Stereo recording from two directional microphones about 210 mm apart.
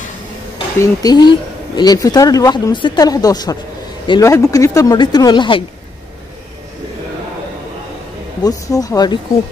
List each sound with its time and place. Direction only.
0.7 s speech: 20° left (ahead or behind)
8.4 s speech: 15° left (ahead or behind)